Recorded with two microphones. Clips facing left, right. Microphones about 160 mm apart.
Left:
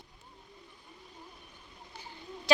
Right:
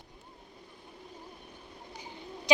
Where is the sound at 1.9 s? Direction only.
15° right (ahead or behind).